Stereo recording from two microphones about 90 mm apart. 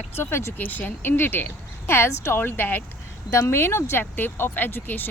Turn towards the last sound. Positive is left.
turn(degrees=20)  # may be behind; listen again after turning